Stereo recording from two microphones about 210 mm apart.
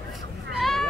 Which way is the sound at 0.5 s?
Centre (ahead or behind).